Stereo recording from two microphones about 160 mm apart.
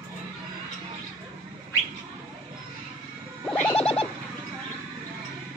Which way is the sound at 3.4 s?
5° left (ahead or behind).